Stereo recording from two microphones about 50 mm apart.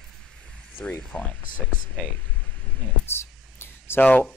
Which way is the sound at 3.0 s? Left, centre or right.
Left.